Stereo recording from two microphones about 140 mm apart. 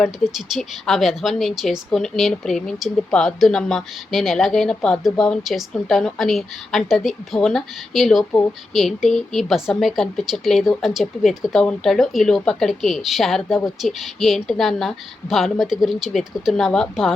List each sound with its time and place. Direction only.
0.0 s speech: centre (ahead or behind)